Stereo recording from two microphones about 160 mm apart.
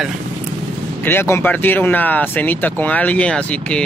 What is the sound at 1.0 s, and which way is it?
Speech, 15° left (ahead or behind).